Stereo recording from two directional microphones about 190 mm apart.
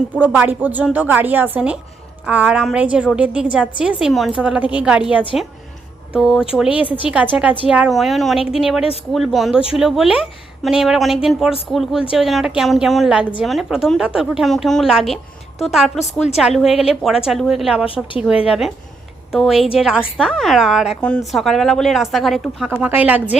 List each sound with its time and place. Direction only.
0.1 s a woman's voice: 5° right (ahead or behind)
17.8 s a woman's voice: 30° left (ahead or behind)
18.2 s a woman's voice: 5° right (ahead or behind)